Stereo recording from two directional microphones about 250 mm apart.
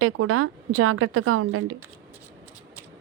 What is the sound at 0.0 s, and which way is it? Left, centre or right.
Speech, right.